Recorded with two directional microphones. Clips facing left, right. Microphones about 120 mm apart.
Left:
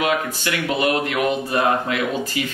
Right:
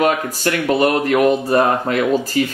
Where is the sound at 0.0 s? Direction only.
40° right (ahead or behind).